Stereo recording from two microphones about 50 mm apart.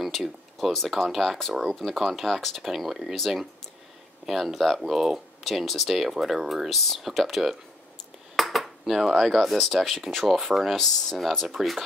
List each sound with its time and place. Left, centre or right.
0.0 s speech: centre
8.4 s dishes: centre
9.2 s speech: centre